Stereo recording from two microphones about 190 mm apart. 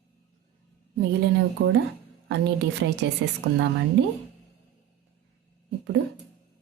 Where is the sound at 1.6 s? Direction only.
60° right (ahead or behind).